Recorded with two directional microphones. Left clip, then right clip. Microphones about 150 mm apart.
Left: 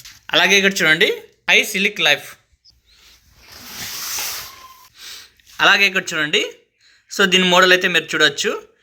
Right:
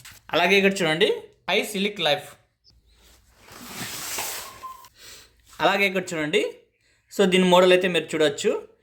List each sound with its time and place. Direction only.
0.3 s speech: 5° right (ahead or behind)
4.9 s a sound: 5° right (ahead or behind)
7.1 s speech: 10° right (ahead or behind)